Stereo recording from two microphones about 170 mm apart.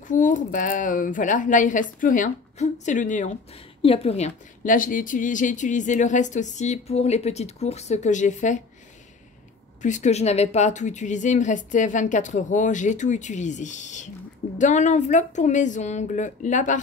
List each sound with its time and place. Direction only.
0.1 s a woman's voice: 50° left (ahead or behind)
3.8 s a woman's voice: 35° left (ahead or behind)
9.8 s a woman's voice: 45° left (ahead or behind)